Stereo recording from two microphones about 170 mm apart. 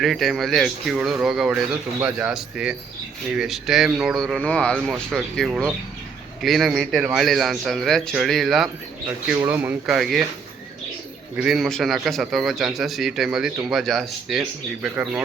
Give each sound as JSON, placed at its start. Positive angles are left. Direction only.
{"t": 0.0, "sound": "speech", "side_deg": 0}
{"t": 9.3, "sound": "speech", "side_deg": -15}
{"t": 11.3, "sound": "speech", "side_deg": 0}